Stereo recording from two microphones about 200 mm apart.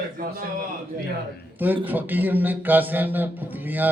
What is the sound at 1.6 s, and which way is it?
A man's voice, 10° right (ahead or behind).